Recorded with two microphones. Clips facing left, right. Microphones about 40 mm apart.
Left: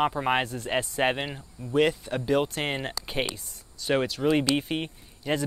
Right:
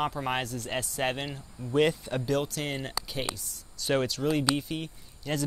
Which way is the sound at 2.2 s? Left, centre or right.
Centre.